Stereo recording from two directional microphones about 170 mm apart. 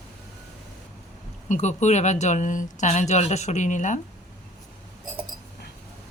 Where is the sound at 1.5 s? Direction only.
45° left (ahead or behind).